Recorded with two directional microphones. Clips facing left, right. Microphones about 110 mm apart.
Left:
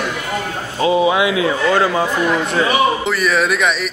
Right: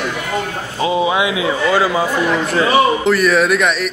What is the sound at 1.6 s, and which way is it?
A man's voice, 5° right (ahead or behind).